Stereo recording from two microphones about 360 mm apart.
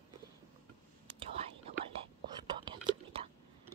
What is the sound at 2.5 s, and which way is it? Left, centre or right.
Whispering, centre.